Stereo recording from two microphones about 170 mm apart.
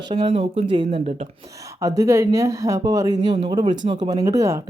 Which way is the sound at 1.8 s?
20° right (ahead or behind).